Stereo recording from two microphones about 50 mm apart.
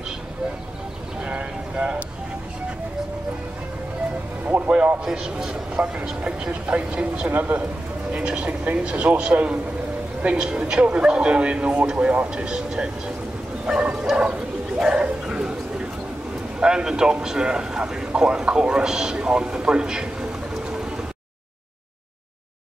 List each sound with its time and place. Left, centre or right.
1.2 s a sound: right
4.5 s music: right
6.0 s speech: right
7.2 s a man's voice: right
8.1 s speech: right
13.7 s bow-wow: centre
14.8 s bird: centre
16.5 s a man's voice: centre